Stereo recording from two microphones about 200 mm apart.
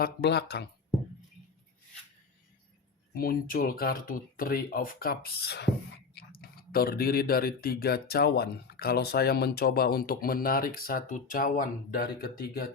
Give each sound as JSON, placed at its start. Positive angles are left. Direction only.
{"t": 0.0, "sound": "speech", "side_deg": 55}
{"t": 3.2, "sound": "speech", "side_deg": 45}